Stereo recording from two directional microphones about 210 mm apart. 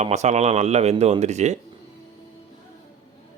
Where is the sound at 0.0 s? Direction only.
35° right (ahead or behind).